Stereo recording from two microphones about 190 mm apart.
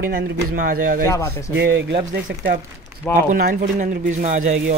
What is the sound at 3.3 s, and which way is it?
Speech, 45° right (ahead or behind).